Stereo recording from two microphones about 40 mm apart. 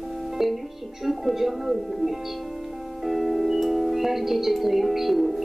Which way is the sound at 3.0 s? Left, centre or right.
Centre.